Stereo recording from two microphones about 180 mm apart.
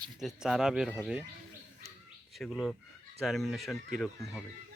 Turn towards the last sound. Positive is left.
turn(degrees=0)  # may be behind; listen again after turning